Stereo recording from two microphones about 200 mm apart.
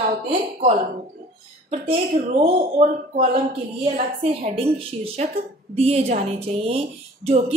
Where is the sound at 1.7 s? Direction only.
30° right (ahead or behind).